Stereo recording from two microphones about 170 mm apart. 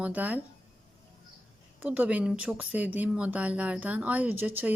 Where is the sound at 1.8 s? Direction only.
10° right (ahead or behind).